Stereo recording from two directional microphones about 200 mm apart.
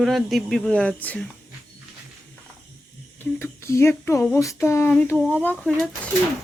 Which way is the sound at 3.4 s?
15° left (ahead or behind).